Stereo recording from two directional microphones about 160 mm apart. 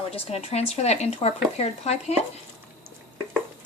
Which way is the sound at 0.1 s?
40° left (ahead or behind).